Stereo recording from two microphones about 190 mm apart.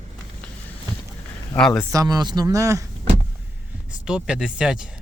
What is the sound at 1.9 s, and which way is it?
Speech, 20° right (ahead or behind).